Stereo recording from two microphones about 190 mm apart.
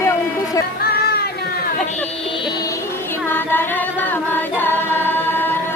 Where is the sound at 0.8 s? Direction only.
55° left (ahead or behind).